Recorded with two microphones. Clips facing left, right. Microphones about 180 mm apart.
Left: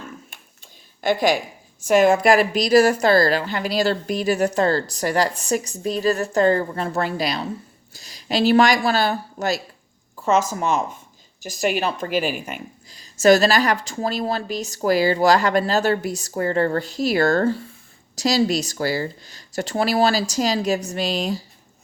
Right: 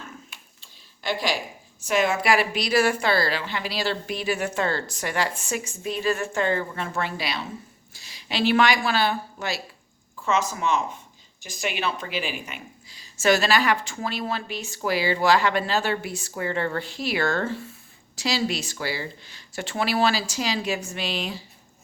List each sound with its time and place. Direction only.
1.0 s a woman's voice: 50° left (ahead or behind)